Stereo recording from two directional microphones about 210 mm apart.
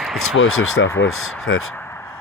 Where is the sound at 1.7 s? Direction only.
10° left (ahead or behind).